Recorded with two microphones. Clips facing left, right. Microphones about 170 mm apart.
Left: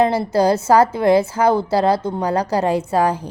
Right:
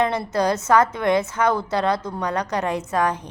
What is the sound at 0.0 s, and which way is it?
A woman's voice, 30° left (ahead or behind).